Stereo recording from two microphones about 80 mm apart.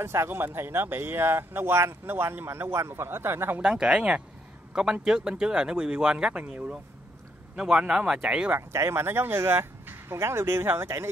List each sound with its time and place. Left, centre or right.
0.0 s speech: right
3.6 s speech: centre
8.5 s speech: right